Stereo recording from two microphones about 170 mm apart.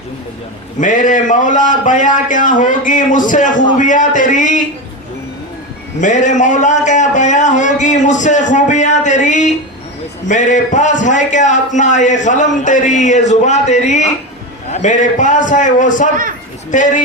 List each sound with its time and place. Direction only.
0.8 s a man's voice: 50° left (ahead or behind)
6.0 s a man's voice: 45° left (ahead or behind)